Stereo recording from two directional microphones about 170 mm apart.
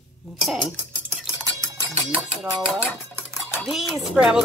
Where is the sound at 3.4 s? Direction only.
Centre (ahead or behind).